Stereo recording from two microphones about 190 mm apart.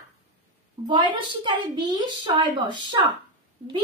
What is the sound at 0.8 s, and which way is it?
A woman's voice, 25° right (ahead or behind).